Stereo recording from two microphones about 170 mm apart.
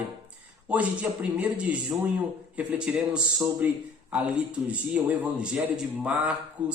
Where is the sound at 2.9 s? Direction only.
5° right (ahead or behind).